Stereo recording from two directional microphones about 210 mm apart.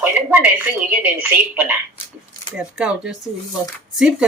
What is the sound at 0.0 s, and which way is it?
Speech, 10° right (ahead or behind).